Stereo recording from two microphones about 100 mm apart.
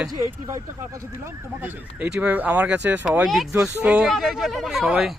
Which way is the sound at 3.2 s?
Centre (ahead or behind).